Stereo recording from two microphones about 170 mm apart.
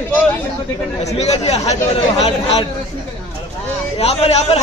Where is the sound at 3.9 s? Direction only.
40° left (ahead or behind).